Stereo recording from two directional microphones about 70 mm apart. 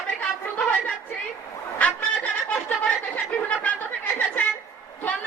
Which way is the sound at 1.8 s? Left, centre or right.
Left.